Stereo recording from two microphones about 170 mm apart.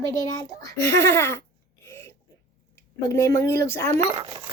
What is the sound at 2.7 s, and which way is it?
A woman's voice, 15° left (ahead or behind).